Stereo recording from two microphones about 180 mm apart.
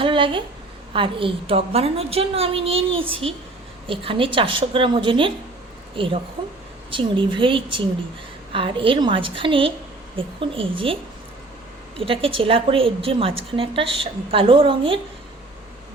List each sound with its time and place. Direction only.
0.0 s a sound: 30° right (ahead or behind)
0.9 s a woman's voice: 30° right (ahead or behind)
11.9 s a woman's voice: 30° right (ahead or behind)